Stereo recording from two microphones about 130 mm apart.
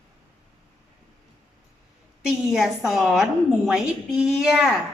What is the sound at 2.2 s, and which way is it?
A woman's voice, 5° right (ahead or behind).